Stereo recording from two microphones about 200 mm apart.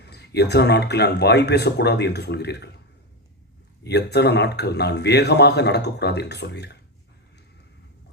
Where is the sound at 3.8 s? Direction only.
55° left (ahead or behind).